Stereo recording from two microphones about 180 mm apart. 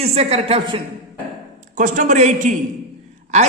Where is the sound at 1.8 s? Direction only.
45° right (ahead or behind).